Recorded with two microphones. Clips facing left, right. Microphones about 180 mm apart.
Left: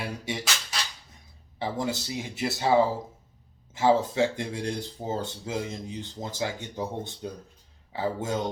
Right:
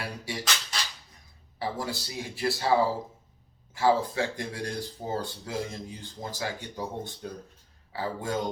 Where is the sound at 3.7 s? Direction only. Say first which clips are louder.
Left 2 dB; 20° left (ahead or behind).